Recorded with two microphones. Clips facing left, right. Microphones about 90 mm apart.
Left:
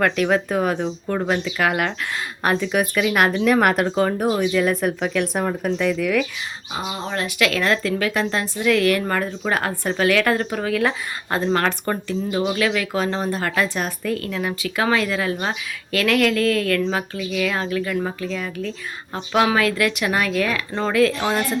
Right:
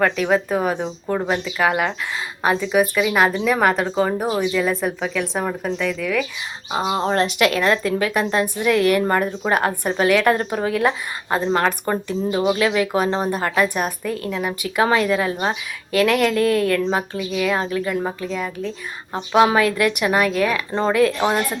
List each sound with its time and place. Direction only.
0.0 s speech: 5° right (ahead or behind)
3.9 s speech: 5° right (ahead or behind)
6.9 s speech: 40° right (ahead or behind)
7.3 s speech: 25° right (ahead or behind)
11.5 s speech: 15° right (ahead or behind)
13.2 s speech: 15° right (ahead or behind)
14.8 s speech: 25° right (ahead or behind)